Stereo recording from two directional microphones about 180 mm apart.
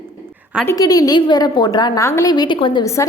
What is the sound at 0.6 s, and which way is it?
A woman's voice, 20° left (ahead or behind).